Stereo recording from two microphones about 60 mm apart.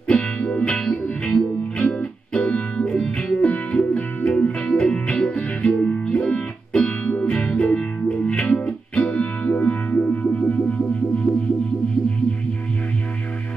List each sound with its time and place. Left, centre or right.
0.1 s music: centre